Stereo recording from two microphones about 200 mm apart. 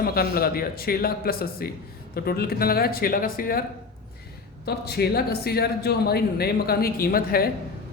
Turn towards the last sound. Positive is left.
turn(degrees=50)  # may be behind; listen again after turning